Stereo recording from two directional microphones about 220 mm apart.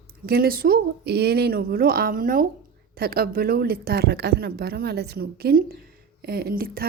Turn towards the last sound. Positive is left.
turn(degrees=-40)  # may be behind; listen again after turning